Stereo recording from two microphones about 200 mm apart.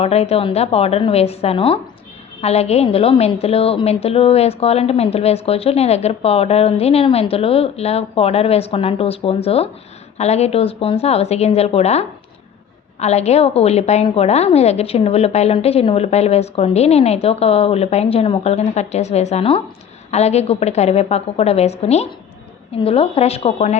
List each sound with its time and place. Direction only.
0.0 s a woman's voice: 30° left (ahead or behind)